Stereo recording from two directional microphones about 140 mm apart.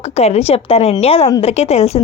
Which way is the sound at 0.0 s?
50° left (ahead or behind).